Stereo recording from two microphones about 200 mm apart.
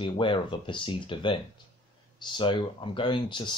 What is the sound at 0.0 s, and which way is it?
Speech, 25° left (ahead or behind).